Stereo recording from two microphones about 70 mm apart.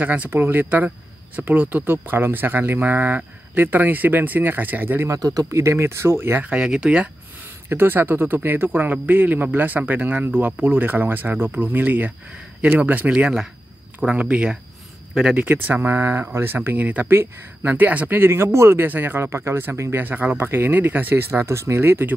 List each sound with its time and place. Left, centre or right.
0.0 s speech: right
5.1 s speech: right
5.6 s speech: right
6.4 s speech: centre
7.7 s speech: right
20.1 s speech: right